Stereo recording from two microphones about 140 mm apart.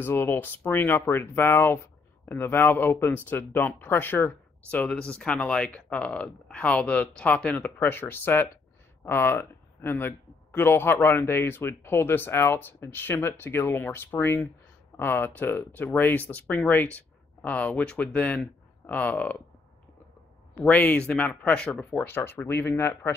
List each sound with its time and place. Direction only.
0.0 s speech: 15° left (ahead or behind)
20.5 s speech: 10° left (ahead or behind)